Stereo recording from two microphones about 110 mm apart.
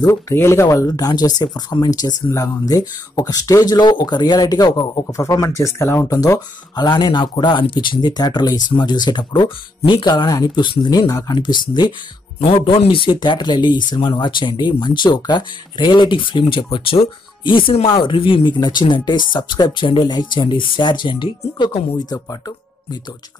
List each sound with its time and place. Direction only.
0.0 s speech: 25° left (ahead or behind)
5.0 s speech: 25° left (ahead or behind)
12.4 s speech: 55° left (ahead or behind)